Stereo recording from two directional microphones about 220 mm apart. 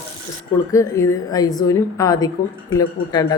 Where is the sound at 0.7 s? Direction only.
15° left (ahead or behind).